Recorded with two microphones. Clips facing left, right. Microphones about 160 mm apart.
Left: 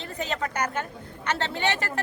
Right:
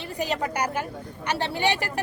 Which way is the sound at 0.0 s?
10° right (ahead or behind).